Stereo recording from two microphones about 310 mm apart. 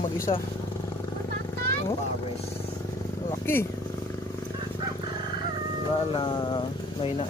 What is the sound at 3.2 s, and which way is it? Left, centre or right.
Purr, centre.